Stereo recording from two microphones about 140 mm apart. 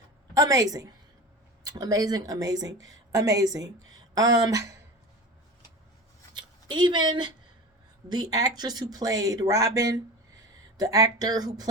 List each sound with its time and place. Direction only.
0.3 s speech: 25° right (ahead or behind)
6.3 s speech: 30° right (ahead or behind)